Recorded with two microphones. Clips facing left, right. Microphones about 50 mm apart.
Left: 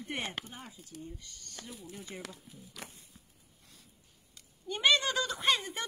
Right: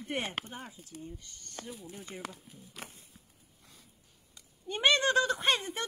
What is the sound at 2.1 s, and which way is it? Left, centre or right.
Speech, right.